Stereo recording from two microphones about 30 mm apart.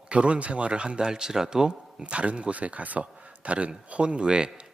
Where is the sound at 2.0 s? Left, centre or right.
Right.